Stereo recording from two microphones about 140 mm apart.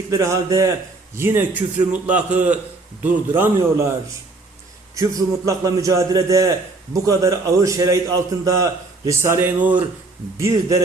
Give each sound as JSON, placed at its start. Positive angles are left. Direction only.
{"t": 0.1, "sound": "a man's voice", "side_deg": -20}
{"t": 4.9, "sound": "a man's voice", "side_deg": -25}
{"t": 10.3, "sound": "a man's voice", "side_deg": -20}